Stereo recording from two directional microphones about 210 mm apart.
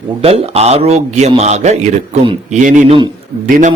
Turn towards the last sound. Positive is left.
turn(degrees=-40)  # may be behind; listen again after turning